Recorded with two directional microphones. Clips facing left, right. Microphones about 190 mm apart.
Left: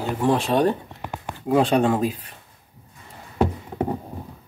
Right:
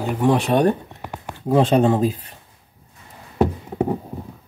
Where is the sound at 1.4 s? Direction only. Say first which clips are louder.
Right 2 dB; 30° right (ahead or behind).